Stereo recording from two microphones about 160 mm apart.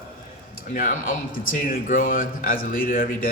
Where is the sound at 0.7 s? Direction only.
55° left (ahead or behind).